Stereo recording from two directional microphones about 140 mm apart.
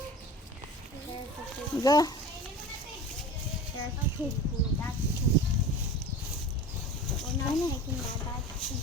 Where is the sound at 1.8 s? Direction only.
25° left (ahead or behind).